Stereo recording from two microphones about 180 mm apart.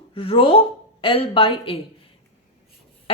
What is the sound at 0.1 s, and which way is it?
A woman's voice, 30° left (ahead or behind).